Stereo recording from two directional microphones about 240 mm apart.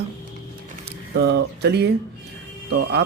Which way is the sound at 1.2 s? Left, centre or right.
Right.